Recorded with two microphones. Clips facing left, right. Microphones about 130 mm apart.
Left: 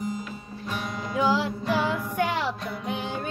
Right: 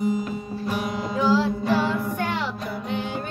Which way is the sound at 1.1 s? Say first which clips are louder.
Right 3 dB; 15° left (ahead or behind).